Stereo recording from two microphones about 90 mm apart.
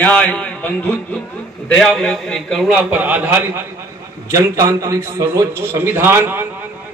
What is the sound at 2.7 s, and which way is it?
Speech, 15° right (ahead or behind).